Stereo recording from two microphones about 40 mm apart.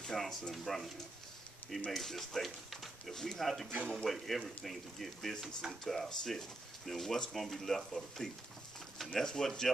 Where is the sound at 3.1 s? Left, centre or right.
Centre.